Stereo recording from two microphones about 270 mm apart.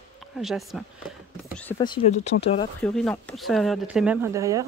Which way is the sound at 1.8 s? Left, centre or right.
Left.